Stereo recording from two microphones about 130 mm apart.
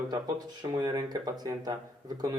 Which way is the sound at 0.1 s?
30° right (ahead or behind).